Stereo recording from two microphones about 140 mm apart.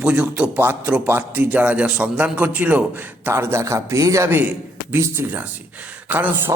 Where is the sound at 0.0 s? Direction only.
10° right (ahead or behind).